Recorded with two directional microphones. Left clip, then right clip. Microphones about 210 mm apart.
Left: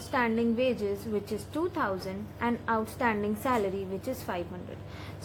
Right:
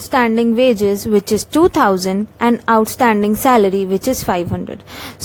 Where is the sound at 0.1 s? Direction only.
45° right (ahead or behind).